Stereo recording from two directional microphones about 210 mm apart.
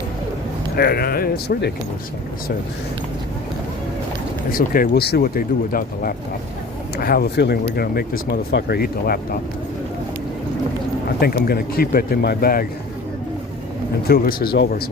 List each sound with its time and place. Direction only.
0.8 s speech: 45° left (ahead or behind)
4.5 s speech: 40° left (ahead or behind)
11.2 s speech: 45° left (ahead or behind)
14.1 s speech: 45° left (ahead or behind)